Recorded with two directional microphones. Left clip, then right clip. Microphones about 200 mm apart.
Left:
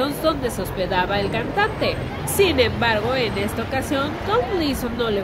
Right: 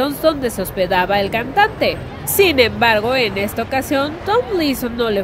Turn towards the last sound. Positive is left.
turn(degrees=-30)  # may be behind; listen again after turning